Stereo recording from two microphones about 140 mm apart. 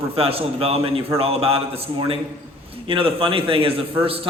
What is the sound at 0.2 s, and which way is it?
A man's voice, 45° right (ahead or behind).